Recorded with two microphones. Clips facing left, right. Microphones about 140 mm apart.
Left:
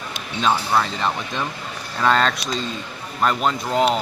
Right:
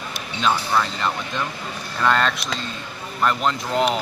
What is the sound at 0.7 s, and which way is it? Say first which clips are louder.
Speech: left 1 dB; 15° left (ahead or behind).